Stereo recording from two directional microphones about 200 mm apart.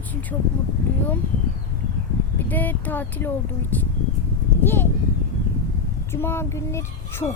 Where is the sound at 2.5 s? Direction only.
10° left (ahead or behind).